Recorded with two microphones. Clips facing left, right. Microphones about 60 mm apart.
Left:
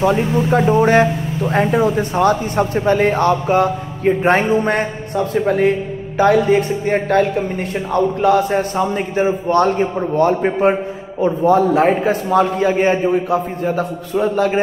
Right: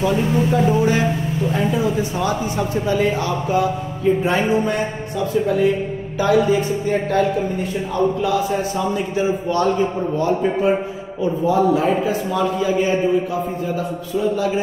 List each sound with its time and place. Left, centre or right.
0.0 s a man's voice: left